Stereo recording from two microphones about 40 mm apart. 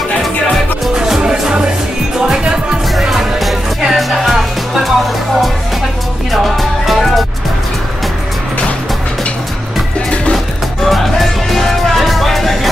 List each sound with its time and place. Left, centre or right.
0.9 s music: centre
3.0 s music: centre
6.3 s music: centre
10.9 s music: centre